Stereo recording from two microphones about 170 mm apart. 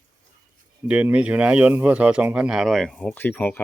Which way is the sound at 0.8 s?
10° right (ahead or behind).